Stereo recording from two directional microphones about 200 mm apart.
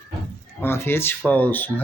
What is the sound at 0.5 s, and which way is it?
Speech, 10° left (ahead or behind).